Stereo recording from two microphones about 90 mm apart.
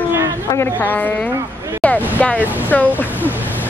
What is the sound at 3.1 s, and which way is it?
Music, 20° right (ahead or behind).